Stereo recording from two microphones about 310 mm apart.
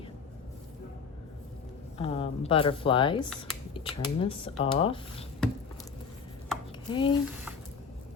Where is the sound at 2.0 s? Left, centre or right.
Centre.